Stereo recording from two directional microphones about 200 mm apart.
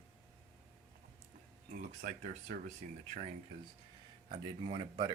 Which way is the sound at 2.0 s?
40° right (ahead or behind).